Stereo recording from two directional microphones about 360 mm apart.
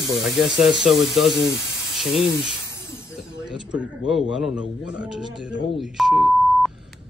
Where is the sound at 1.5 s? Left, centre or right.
Right.